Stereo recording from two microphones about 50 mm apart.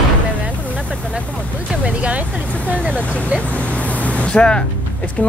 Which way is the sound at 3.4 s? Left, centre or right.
Left.